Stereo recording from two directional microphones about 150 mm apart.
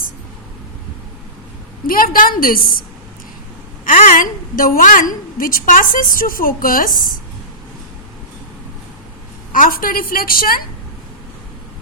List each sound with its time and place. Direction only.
1.9 s a woman's voice: 70° left (ahead or behind)
3.8 s a woman's voice: 60° left (ahead or behind)
9.5 s a woman's voice: 70° left (ahead or behind)